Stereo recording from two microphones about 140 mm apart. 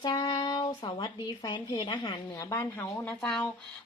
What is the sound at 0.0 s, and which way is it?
Speech, 30° left (ahead or behind).